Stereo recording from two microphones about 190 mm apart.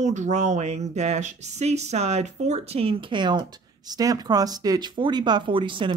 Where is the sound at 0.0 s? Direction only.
40° right (ahead or behind).